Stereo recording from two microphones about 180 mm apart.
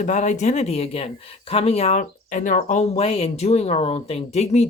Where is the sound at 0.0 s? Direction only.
40° left (ahead or behind).